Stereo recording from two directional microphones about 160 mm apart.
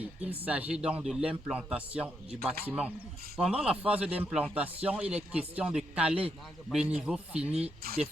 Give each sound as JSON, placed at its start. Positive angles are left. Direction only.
{"t": 0.0, "sound": "speech", "side_deg": -10}
{"t": 7.8, "sound": "speech", "side_deg": -70}